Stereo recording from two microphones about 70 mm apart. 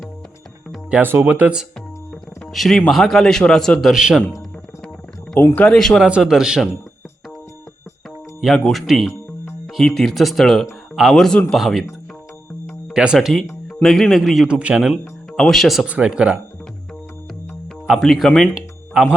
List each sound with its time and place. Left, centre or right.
1.2 s speech: right
2.5 s a man's voice: centre
5.4 s speech: left
5.7 s speech: centre
6.0 s speech: centre
8.5 s a man's voice: centre
12.9 s speech: centre
13.1 s a man's voice: centre
14.4 s speech: centre
15.3 s speech: centre
15.9 s speech: centre
17.8 s a man's voice: centre
18.9 s speech: centre